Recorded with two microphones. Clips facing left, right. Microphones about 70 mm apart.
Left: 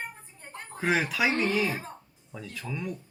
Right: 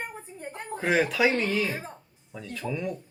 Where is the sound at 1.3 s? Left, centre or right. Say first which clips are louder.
Even; left.